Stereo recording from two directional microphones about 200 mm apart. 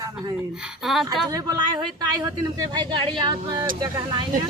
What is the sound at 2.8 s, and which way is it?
Speech, 20° right (ahead or behind).